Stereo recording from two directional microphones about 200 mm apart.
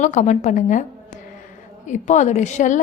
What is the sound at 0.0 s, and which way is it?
Speech, 35° left (ahead or behind).